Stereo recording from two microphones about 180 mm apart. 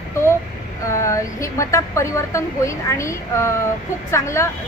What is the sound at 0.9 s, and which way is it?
Speech, 15° left (ahead or behind).